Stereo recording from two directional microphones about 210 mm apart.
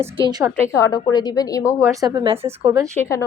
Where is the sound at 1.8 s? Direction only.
15° right (ahead or behind).